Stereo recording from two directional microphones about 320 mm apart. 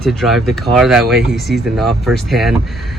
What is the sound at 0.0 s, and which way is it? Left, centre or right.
Speech, centre.